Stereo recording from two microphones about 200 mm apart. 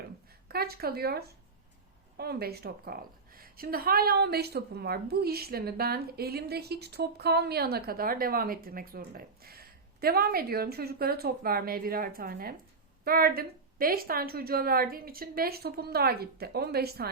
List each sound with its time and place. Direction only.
0.4 s a woman's voice: 50° right (ahead or behind)